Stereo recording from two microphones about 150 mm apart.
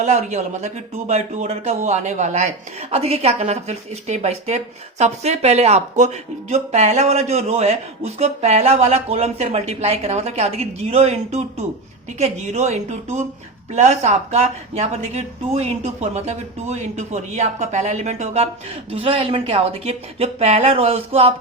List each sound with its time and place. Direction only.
0.0 s speech: 50° right (ahead or behind)